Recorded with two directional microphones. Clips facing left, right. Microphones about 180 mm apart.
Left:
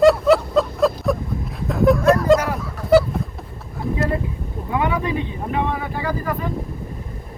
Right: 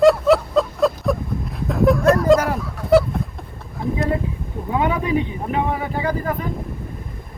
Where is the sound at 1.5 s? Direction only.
Centre (ahead or behind).